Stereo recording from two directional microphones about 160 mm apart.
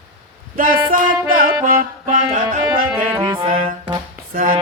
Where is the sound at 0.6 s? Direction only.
60° right (ahead or behind).